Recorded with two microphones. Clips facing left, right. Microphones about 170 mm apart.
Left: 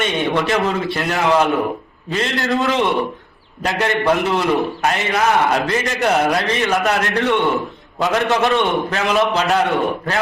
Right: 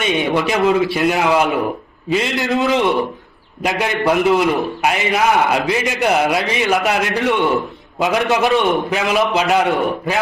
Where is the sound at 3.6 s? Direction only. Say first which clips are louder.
Even; 15° right (ahead or behind).